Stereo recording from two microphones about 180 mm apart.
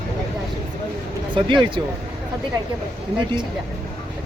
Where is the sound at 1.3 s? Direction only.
25° right (ahead or behind).